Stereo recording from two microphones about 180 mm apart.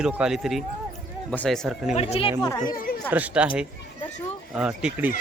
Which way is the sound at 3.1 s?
10° right (ahead or behind).